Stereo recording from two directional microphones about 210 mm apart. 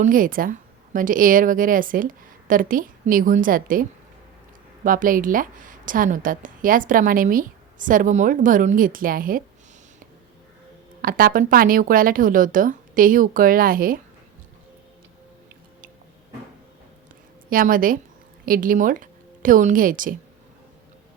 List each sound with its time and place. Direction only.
0.0 s a woman's voice: 40° right (ahead or behind)
11.0 s a woman's voice: 40° right (ahead or behind)
17.5 s a woman's voice: 40° right (ahead or behind)